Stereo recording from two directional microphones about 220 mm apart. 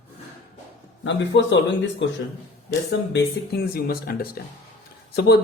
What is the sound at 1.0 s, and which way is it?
Speech, 55° left (ahead or behind).